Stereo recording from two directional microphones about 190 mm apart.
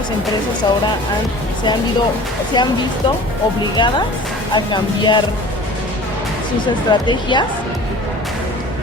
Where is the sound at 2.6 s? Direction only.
20° left (ahead or behind).